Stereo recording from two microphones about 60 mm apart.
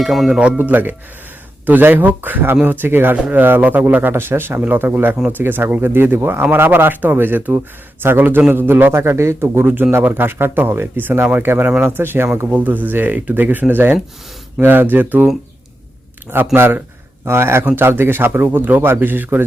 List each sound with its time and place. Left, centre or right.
0.0 s speech: centre
0.3 s speech: centre
0.6 s speech: right
4.1 s speech: right
12.5 s speech: right
16.6 s a man's voice: right